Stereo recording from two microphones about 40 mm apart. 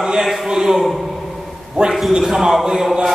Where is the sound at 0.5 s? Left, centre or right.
Centre.